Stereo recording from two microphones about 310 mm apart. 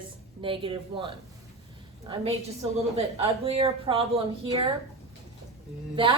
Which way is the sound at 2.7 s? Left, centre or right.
Centre.